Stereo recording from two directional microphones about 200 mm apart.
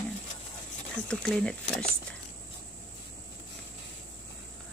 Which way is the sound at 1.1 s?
5° left (ahead or behind).